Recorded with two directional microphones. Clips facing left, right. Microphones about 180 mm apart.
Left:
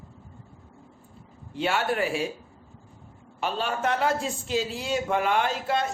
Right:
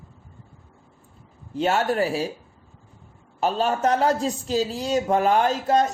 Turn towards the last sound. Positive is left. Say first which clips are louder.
# right 6 dB
turn(degrees=-40)  # may be behind; listen again after turning